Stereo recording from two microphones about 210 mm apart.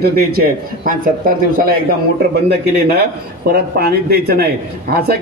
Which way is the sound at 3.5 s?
45° right (ahead or behind).